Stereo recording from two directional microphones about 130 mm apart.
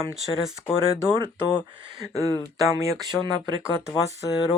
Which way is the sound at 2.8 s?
30° right (ahead or behind).